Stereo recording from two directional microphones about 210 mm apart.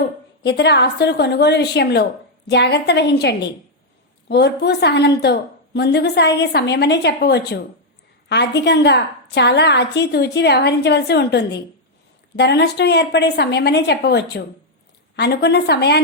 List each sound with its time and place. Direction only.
0.4 s a woman's voice: 55° left (ahead or behind)